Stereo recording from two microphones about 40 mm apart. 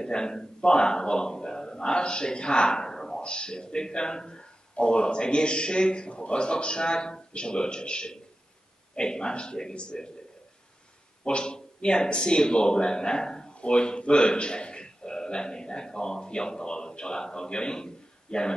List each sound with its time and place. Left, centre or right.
0.0 s a man's voice: centre
11.2 s a man's voice: left